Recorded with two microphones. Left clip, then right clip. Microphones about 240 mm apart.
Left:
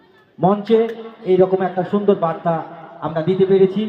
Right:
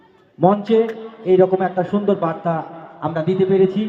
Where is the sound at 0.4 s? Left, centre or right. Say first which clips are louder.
Even; right.